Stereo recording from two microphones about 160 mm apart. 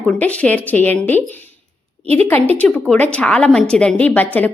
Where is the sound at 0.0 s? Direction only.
10° left (ahead or behind).